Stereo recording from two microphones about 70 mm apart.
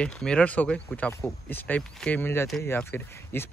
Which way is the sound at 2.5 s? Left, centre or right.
Centre.